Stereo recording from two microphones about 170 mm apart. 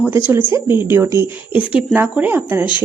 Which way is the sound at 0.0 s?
10° right (ahead or behind).